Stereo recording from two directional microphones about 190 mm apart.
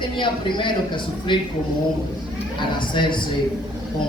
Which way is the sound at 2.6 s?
25° left (ahead or behind).